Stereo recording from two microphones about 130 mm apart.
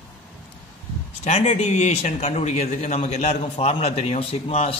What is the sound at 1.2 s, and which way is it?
Speech, 60° left (ahead or behind).